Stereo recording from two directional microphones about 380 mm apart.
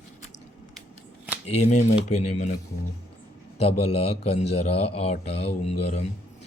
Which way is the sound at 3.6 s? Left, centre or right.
Centre.